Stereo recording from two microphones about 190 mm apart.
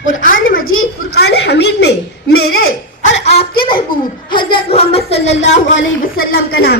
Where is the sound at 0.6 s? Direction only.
90° left.